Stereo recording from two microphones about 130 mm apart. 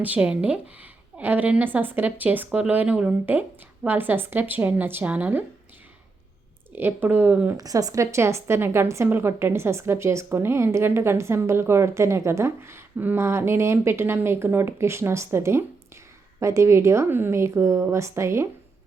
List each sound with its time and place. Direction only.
0.0 s speech: 10° right (ahead or behind)
6.7 s speech: 15° right (ahead or behind)
7.5 s a woman's voice: 30° right (ahead or behind)